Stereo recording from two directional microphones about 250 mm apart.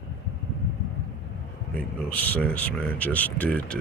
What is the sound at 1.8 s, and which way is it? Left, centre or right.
Speech, centre.